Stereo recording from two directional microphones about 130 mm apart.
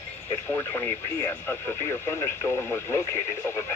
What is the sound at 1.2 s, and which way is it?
Speech, 20° left (ahead or behind).